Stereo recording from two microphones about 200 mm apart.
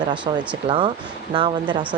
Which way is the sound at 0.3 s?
20° right (ahead or behind).